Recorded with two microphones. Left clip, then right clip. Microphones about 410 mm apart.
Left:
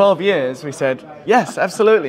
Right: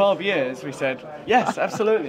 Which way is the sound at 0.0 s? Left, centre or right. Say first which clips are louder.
Left 6 dB; left.